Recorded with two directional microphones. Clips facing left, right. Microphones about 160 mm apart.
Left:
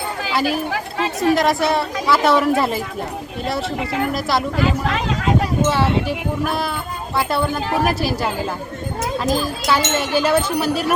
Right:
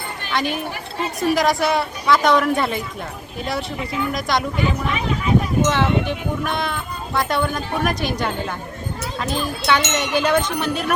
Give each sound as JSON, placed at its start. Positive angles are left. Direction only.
{"t": 0.3, "sound": "speech", "side_deg": 5}
{"t": 0.7, "sound": "a sound", "side_deg": 90}
{"t": 1.2, "sound": "speech", "side_deg": 0}
{"t": 3.8, "sound": "speech", "side_deg": 80}
{"t": 4.1, "sound": "speech", "side_deg": 5}
{"t": 4.6, "sound": "speech", "side_deg": 90}
{"t": 5.6, "sound": "speech", "side_deg": 5}
{"t": 9.3, "sound": "speech", "side_deg": 5}